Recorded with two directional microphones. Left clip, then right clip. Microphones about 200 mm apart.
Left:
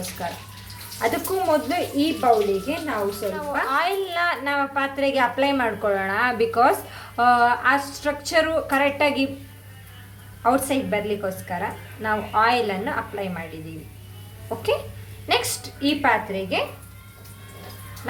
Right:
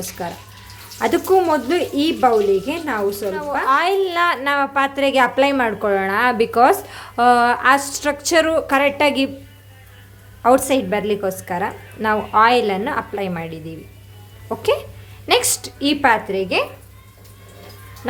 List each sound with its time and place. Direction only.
0.9 s a woman's voice: 45° right (ahead or behind)
10.4 s a woman's voice: 40° right (ahead or behind)
15.3 s speech: 45° right (ahead or behind)
18.0 s music: 50° right (ahead or behind)